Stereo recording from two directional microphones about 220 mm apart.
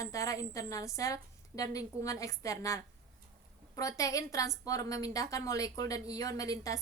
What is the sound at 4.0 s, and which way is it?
A woman's voice, 15° left (ahead or behind).